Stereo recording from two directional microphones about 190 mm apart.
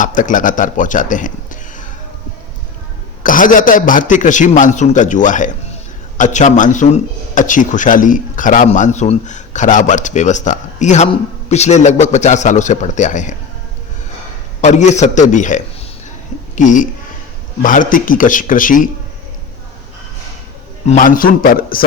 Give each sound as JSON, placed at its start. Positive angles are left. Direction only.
{"t": 0.0, "sound": "a man's voice", "side_deg": 45}
{"t": 3.2, "sound": "a man's voice", "side_deg": 45}
{"t": 14.6, "sound": "a man's voice", "side_deg": 40}
{"t": 20.8, "sound": "a man's voice", "side_deg": 45}